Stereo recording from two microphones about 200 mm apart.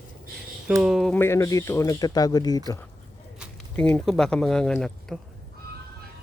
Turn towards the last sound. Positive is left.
turn(degrees=5)  # may be behind; listen again after turning